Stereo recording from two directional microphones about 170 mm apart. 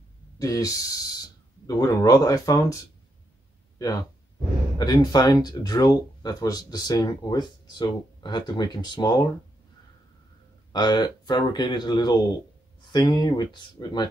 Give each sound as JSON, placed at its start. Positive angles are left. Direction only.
{"t": 0.4, "sound": "speech", "side_deg": 20}
{"t": 10.7, "sound": "speech", "side_deg": 25}